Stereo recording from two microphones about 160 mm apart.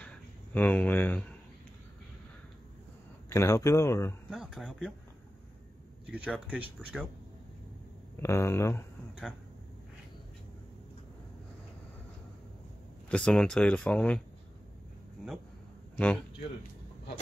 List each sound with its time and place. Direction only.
0.6 s speech: 10° left (ahead or behind)
3.3 s speech: 20° left (ahead or behind)
4.3 s speech: centre (ahead or behind)
6.1 s speech: 10° right (ahead or behind)
8.2 s speech: 15° left (ahead or behind)
13.1 s speech: 5° left (ahead or behind)